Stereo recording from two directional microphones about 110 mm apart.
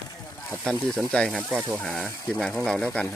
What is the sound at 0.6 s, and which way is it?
Speech, 5° left (ahead or behind).